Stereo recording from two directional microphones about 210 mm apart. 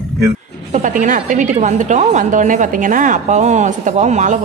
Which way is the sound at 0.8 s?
40° right (ahead or behind).